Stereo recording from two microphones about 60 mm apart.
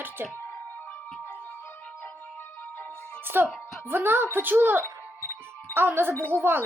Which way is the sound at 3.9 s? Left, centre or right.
Right.